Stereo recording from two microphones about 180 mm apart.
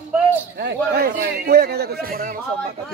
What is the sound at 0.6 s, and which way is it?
A man's voice, 65° right (ahead or behind).